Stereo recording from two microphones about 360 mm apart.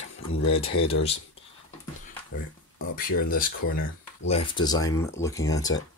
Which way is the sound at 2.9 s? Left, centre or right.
Left.